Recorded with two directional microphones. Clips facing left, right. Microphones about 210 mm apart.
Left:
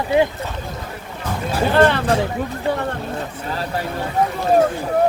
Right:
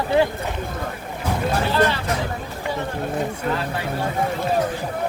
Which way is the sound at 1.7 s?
55° left (ahead or behind).